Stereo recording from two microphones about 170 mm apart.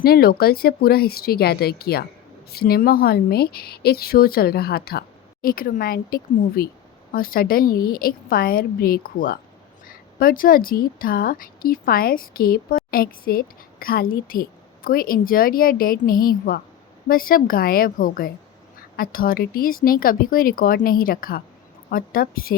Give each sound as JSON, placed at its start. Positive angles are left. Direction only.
{"t": 0.0, "sound": "a woman's voice", "side_deg": 65}